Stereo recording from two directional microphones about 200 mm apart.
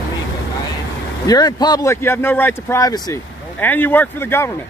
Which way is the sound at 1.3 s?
20° left (ahead or behind).